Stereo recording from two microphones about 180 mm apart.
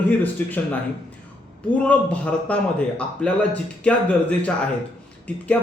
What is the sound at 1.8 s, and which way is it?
A man's voice, 5° left (ahead or behind).